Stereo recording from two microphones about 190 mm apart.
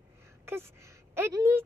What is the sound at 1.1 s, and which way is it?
Speech, 15° right (ahead or behind).